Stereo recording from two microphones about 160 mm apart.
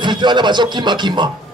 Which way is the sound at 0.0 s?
30° right (ahead or behind).